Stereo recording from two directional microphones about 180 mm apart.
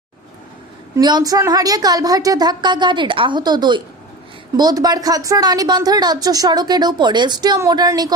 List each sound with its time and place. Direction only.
0.9 s a woman's voice: 20° right (ahead or behind)